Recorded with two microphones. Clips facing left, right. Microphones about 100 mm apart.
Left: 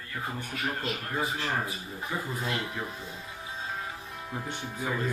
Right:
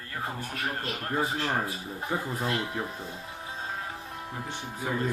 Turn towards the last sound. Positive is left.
turn(degrees=-45)  # may be behind; listen again after turning